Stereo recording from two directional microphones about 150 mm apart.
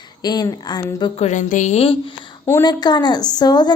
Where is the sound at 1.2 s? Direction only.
50° left (ahead or behind).